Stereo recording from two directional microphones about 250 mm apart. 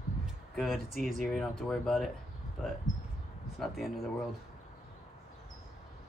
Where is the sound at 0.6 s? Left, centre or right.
Centre.